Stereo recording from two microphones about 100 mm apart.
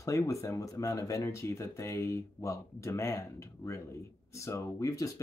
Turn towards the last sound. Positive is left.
turn(degrees=35)  # may be behind; listen again after turning